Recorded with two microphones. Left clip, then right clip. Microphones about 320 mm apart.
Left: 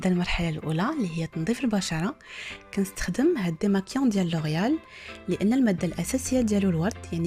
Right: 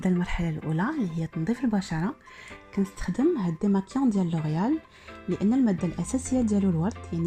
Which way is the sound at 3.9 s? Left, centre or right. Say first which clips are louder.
Even; left.